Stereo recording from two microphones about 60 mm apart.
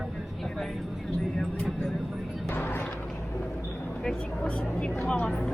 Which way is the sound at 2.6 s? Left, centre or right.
Left.